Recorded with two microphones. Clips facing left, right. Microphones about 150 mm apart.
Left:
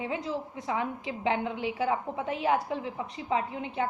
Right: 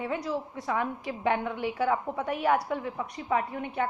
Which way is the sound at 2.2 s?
25° left (ahead or behind).